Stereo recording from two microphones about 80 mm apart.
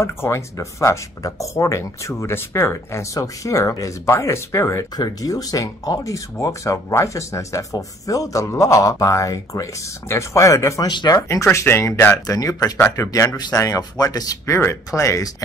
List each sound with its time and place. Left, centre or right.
0.0 s speech: left
4.9 s speech: left
10.9 s speech: left
11.2 s speech: left
12.3 s speech: left